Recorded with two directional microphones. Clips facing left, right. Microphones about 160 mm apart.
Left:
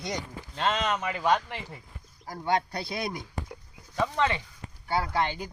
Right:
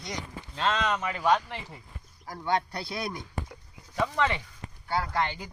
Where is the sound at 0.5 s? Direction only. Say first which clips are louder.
Even; 5° left (ahead or behind).